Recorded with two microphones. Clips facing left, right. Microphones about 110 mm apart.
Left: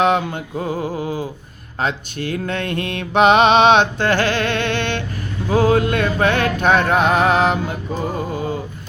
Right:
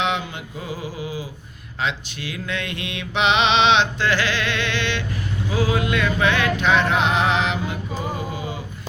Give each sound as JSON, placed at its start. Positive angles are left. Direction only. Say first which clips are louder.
{"t": 0.0, "sound": "mantra", "louder": "left 7 dB", "side_deg": 45}